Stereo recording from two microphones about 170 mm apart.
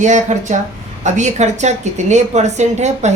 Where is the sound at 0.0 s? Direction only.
45° right (ahead or behind).